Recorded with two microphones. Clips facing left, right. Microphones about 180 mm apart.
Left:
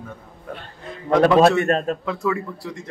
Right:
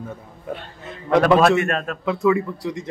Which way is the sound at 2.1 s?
5° right (ahead or behind).